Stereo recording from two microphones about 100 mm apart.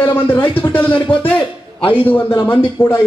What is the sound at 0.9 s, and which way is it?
Speech, 60° left (ahead or behind).